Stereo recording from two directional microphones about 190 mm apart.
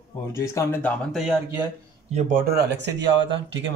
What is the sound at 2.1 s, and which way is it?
Speech, 50° right (ahead or behind).